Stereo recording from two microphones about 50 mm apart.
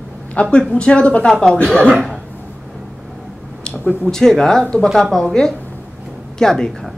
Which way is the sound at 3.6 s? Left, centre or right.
Left.